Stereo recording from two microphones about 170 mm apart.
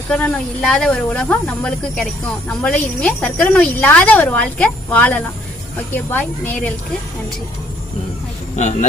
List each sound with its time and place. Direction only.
0.1 s speech: 5° left (ahead or behind)
8.5 s speech: 45° left (ahead or behind)